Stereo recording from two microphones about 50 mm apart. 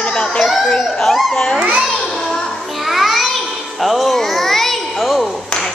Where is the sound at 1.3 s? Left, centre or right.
Centre.